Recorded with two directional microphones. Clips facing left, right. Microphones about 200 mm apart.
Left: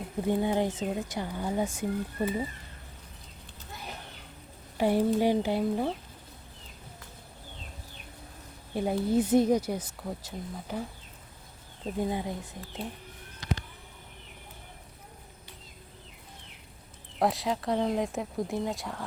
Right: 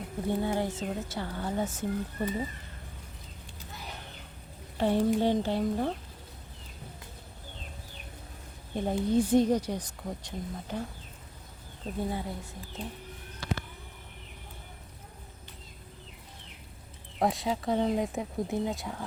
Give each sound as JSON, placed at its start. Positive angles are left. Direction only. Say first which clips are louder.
{"t": 0.3, "sound": "speech", "louder": "left 3 dB", "side_deg": 15}
{"t": 4.8, "sound": "speech", "louder": "left 1 dB", "side_deg": 10}
{"t": 8.7, "sound": "speech", "louder": "even", "side_deg": 10}
{"t": 11.9, "sound": "speech", "louder": "left 3 dB", "side_deg": 15}
{"t": 13.4, "sound": "a sound", "louder": "left 1 dB", "side_deg": 20}
{"t": 17.2, "sound": "speech", "louder": "left 1 dB", "side_deg": 0}